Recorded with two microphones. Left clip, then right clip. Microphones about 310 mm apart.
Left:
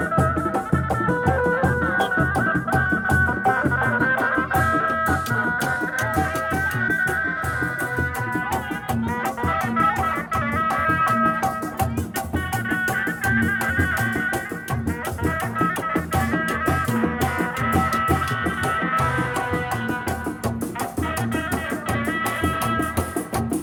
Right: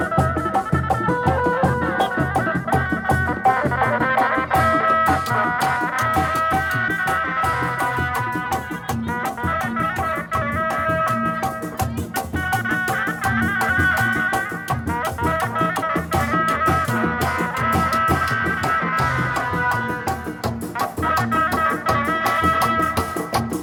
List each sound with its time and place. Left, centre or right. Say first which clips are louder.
1.5 s music: right 1 dB; right
9.5 s music: left 3 dB; centre
12.7 s music: right 2 dB; centre
15.5 s music: right 2 dB; centre
21.1 s music: right 7 dB; centre